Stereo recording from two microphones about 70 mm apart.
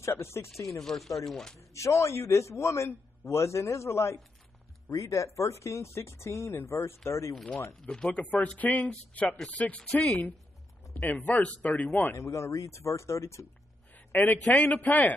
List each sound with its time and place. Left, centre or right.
0.1 s speech: left
0.7 s speech: centre
1.6 s a man's voice: left
7.8 s speech: centre
11.0 s speech: left
12.2 s a man's voice: left
13.9 s a sound: left
14.5 s speech: left